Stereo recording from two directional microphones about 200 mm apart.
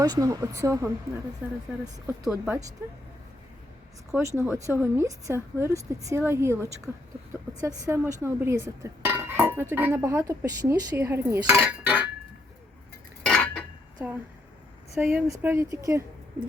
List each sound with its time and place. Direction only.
0.0 s speech: 20° right (ahead or behind)
4.4 s speech: 15° right (ahead or behind)
13.2 s cutlery: 5° left (ahead or behind)
14.9 s speech: 10° right (ahead or behind)